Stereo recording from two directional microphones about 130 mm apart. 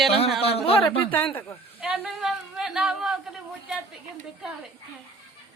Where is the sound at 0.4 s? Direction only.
50° left (ahead or behind).